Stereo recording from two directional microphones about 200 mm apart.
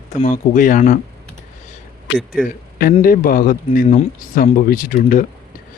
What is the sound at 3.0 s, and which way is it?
Speech, 45° left (ahead or behind).